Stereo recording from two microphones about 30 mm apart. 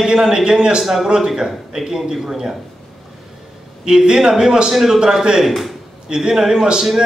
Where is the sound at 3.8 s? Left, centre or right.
Right.